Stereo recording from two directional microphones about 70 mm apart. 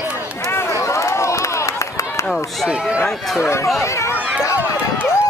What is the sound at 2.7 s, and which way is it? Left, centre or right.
Run, centre.